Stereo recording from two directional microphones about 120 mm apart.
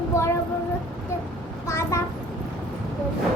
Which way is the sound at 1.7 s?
25° left (ahead or behind).